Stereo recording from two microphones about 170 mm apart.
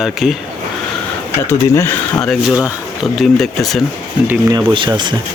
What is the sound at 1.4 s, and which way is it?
Speech, 15° left (ahead or behind).